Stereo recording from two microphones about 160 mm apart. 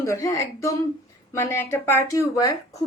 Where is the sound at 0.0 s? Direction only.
20° left (ahead or behind).